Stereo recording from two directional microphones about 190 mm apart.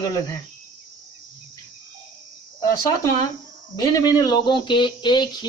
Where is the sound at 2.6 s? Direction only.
20° left (ahead or behind).